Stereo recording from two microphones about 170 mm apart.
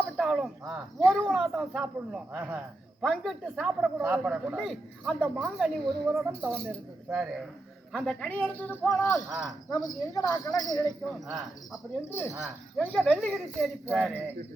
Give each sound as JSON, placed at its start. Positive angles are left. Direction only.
{"t": 0.0, "sound": "a woman's voice", "side_deg": 0}
{"t": 9.0, "sound": "speech", "side_deg": 0}
{"t": 9.6, "sound": "speech", "side_deg": 20}
{"t": 11.3, "sound": "speech", "side_deg": 0}
{"t": 12.0, "sound": "a woman's voice", "side_deg": 15}